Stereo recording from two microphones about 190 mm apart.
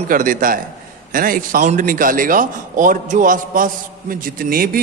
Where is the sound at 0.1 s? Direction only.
45° right (ahead or behind).